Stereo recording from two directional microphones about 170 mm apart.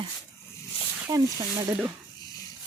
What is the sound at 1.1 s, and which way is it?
Speech, 20° right (ahead or behind).